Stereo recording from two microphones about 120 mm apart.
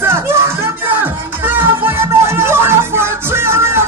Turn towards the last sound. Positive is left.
turn(degrees=-20)  # may be behind; listen again after turning